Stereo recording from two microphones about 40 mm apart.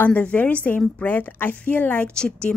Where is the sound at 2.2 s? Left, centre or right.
Left.